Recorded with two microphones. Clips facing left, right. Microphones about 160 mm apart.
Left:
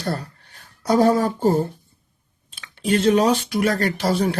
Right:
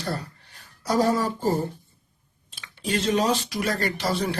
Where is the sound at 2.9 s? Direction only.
55° left (ahead or behind).